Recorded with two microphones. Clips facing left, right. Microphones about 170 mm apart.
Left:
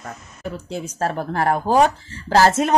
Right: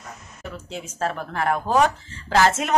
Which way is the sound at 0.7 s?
40° left (ahead or behind).